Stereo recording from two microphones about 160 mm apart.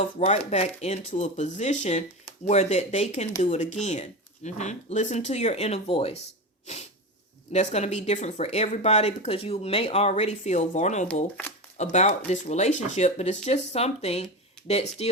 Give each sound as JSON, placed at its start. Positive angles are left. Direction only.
{"t": 0.2, "sound": "speech", "side_deg": 45}
{"t": 7.5, "sound": "speech", "side_deg": 45}
{"t": 11.1, "sound": "speech", "side_deg": 10}
{"t": 11.8, "sound": "speech", "side_deg": 45}